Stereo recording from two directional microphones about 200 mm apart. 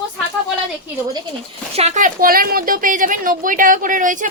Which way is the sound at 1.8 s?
35° right (ahead or behind).